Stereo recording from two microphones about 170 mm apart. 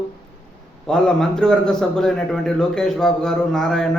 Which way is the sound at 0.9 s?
5° left (ahead or behind).